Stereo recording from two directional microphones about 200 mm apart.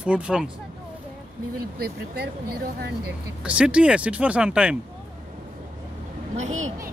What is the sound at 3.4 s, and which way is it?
Speech, 5° right (ahead or behind).